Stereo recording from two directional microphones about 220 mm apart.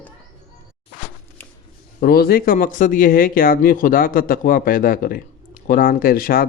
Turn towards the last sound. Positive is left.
turn(degrees=40)  # may be behind; listen again after turning